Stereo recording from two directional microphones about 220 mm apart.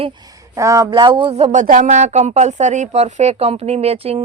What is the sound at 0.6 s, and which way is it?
Speech, 15° right (ahead or behind).